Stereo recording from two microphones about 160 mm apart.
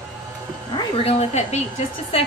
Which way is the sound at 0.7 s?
35° left (ahead or behind).